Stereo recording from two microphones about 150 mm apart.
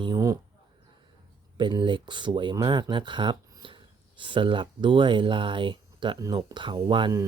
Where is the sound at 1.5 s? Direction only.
30° right (ahead or behind).